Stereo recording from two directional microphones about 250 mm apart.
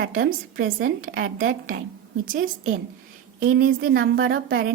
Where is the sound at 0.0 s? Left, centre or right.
Right.